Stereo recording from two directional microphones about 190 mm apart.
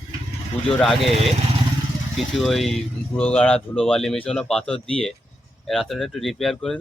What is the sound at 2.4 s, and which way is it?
Speech, centre (ahead or behind).